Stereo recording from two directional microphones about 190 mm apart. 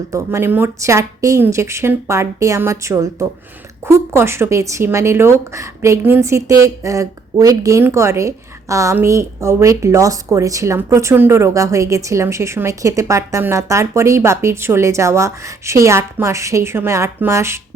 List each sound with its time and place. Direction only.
0.1 s a woman's voice: 15° right (ahead or behind)